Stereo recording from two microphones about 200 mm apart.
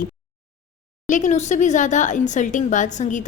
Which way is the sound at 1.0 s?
40° left (ahead or behind).